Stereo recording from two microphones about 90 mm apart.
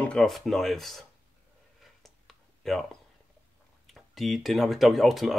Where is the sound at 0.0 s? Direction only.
10° left (ahead or behind).